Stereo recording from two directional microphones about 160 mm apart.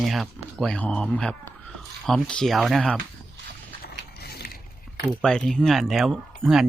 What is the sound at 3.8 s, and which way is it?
Mechanisms, 75° left (ahead or behind).